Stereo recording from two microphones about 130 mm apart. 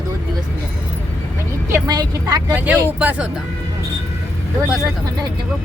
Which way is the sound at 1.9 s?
30° right (ahead or behind).